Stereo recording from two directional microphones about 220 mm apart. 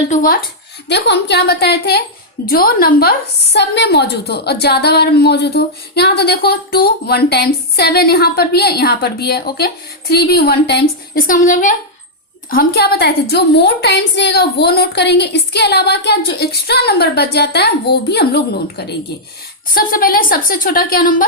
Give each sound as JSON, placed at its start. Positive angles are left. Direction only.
{"t": 0.1, "sound": "a woman's voice", "side_deg": 40}
{"t": 0.9, "sound": "a woman's voice", "side_deg": 50}